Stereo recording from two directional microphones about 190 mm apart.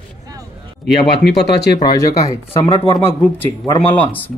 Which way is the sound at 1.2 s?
60° left (ahead or behind).